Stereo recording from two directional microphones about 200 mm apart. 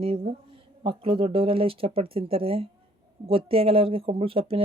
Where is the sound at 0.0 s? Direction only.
30° right (ahead or behind).